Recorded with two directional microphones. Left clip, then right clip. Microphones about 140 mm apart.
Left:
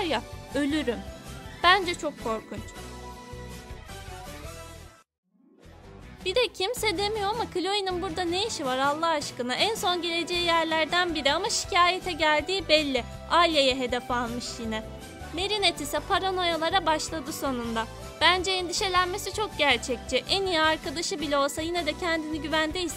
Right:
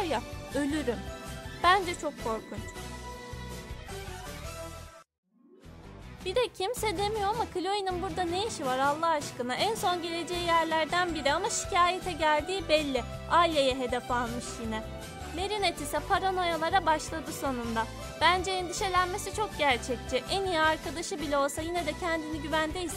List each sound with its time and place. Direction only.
0.0 s speech: 30° left (ahead or behind)
6.2 s speech: 30° left (ahead or behind)